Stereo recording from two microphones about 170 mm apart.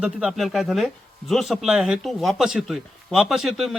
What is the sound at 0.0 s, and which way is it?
Speech, 5° right (ahead or behind).